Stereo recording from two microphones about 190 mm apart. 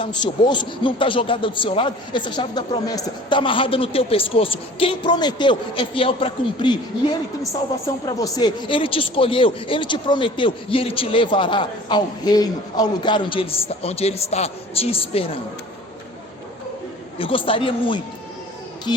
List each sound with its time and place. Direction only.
0.0 s a man's voice: 25° left (ahead or behind)
17.2 s a man's voice: 30° left (ahead or behind)